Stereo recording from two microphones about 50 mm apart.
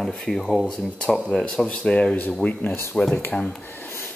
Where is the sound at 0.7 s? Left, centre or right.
Centre.